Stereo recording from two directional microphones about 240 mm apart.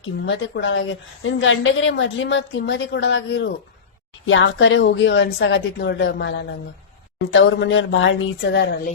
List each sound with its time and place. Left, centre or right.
0.0 s a woman's voice: left